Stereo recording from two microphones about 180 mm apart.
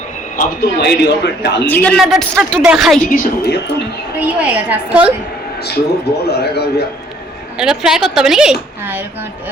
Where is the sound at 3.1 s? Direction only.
65° left (ahead or behind).